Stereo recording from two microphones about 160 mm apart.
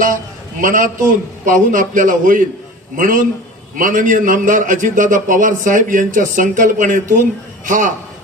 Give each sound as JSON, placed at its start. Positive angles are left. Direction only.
{"t": 0.6, "sound": "a man's voice", "side_deg": -55}